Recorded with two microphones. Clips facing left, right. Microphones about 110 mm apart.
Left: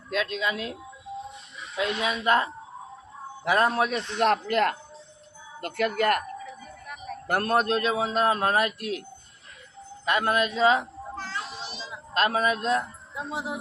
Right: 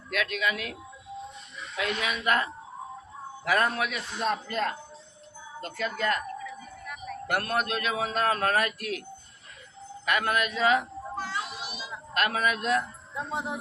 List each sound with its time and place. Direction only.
0.1 s a man's voice: 25° left (ahead or behind)
4.2 s speech: 75° left (ahead or behind)
7.3 s a man's voice: 35° left (ahead or behind)
10.1 s a man's voice: 30° left (ahead or behind)
11.1 s music: 15° right (ahead or behind)
12.1 s a man's voice: 30° left (ahead or behind)
13.1 s speech: 5° left (ahead or behind)